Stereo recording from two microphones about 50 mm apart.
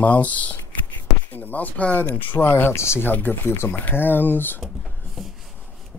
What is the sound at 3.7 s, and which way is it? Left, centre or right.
Speech, left.